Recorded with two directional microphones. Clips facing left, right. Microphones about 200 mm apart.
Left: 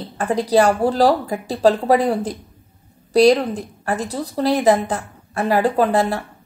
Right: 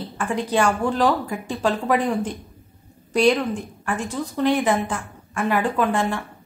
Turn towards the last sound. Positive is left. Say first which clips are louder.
# left 4 dB
turn(degrees=35)  # may be behind; listen again after turning